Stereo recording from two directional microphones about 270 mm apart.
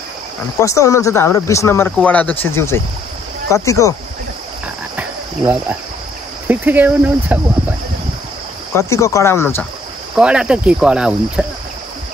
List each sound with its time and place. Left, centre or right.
0.6 s speech: centre
4.9 s cricket: centre
6.4 s speech: centre
8.7 s speech: centre
10.1 s speech: centre